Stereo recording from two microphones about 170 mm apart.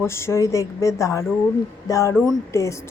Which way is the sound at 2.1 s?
Centre (ahead or behind).